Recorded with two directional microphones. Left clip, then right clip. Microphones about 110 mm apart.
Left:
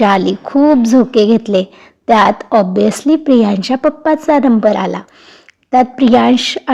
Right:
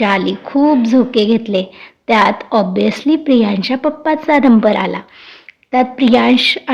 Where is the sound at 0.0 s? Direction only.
40° left (ahead or behind).